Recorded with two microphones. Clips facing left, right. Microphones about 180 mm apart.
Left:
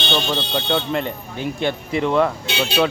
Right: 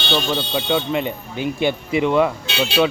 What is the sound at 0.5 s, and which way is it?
Speech, 5° right (ahead or behind).